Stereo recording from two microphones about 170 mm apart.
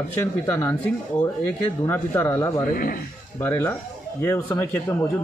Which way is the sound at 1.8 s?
15° left (ahead or behind).